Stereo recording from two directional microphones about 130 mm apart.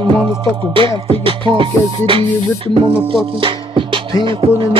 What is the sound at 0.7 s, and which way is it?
Music, 40° right (ahead or behind).